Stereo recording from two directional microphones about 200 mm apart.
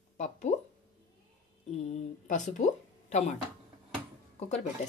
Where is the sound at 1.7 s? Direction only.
30° left (ahead or behind).